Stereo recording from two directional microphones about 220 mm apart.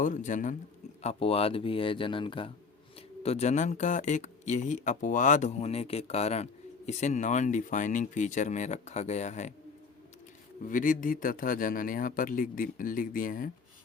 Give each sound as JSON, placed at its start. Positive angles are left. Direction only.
{"t": 0.0, "sound": "speech", "side_deg": 35}
{"t": 10.7, "sound": "speech", "side_deg": 35}